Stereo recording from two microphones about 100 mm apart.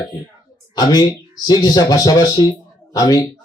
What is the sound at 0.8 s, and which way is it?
A man's voice, 45° left (ahead or behind).